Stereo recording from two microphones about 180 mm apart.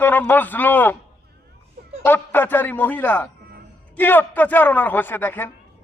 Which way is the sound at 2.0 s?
10° left (ahead or behind).